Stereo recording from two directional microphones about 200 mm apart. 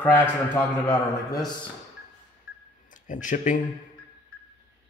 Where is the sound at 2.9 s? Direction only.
40° left (ahead or behind).